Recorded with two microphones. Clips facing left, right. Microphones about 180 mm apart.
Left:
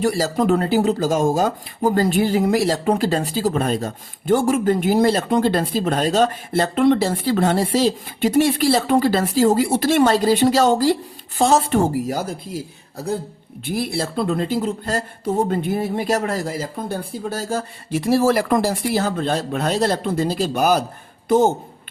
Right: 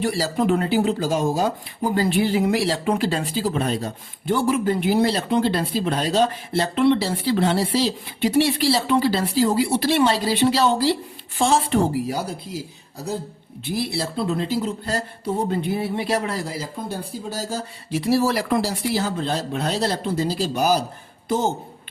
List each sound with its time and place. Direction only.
0.0 s speech: 45° left (ahead or behind)
13.7 s speech: 50° left (ahead or behind)